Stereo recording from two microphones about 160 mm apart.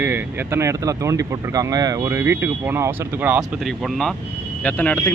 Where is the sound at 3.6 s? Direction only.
5° left (ahead or behind).